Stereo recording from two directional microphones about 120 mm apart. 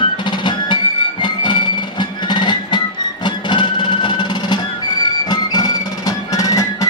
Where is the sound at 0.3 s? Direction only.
40° left (ahead or behind).